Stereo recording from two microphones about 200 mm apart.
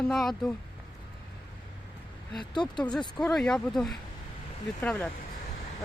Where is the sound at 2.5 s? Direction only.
20° left (ahead or behind).